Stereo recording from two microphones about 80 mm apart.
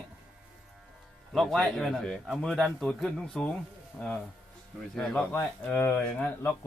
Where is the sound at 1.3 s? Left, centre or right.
Centre.